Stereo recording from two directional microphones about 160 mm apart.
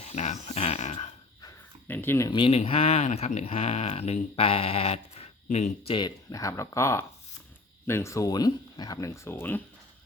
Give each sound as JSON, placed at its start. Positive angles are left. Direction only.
{"t": 0.0, "sound": "a sound", "side_deg": 45}
{"t": 1.9, "sound": "speech", "side_deg": 15}
{"t": 2.3, "sound": "speech", "side_deg": 30}
{"t": 5.9, "sound": "speech", "side_deg": 25}